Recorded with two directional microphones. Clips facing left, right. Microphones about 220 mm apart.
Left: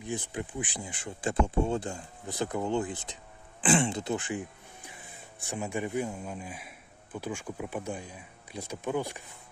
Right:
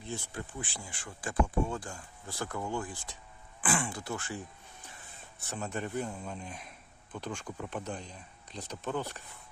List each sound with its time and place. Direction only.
0.0 s speech: 20° left (ahead or behind)